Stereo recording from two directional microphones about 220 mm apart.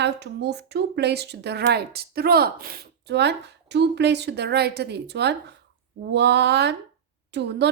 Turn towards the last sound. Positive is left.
turn(degrees=-50)  # may be behind; listen again after turning